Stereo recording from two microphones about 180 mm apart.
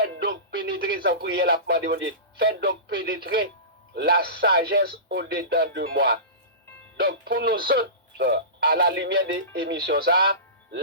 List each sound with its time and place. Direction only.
0.3 s speech: 55° right (ahead or behind)